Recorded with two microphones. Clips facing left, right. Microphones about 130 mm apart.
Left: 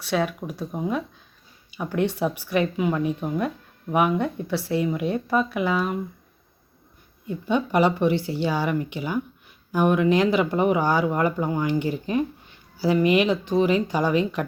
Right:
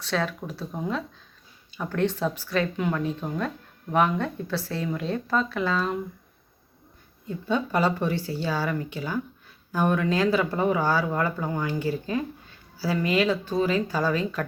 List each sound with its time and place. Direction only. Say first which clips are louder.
0.0 s speech: left 3 dB; 15° left (ahead or behind)
7.3 s speech: left 3 dB; 15° left (ahead or behind)